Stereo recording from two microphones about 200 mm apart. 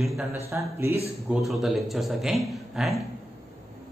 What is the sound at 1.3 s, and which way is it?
Speech, centre (ahead or behind).